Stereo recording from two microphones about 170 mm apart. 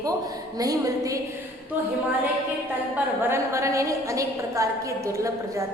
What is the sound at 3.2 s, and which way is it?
A woman's voice, 15° right (ahead or behind).